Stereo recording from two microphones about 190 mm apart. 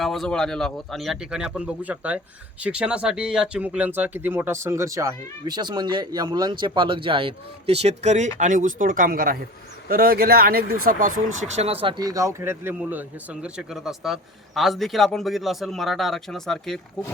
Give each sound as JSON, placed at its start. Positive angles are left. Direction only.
{"t": 0.0, "sound": "a man's voice", "side_deg": 0}
{"t": 11.5, "sound": "speech", "side_deg": -30}